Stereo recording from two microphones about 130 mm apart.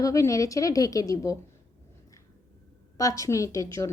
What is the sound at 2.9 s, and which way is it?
Speech, 25° left (ahead or behind).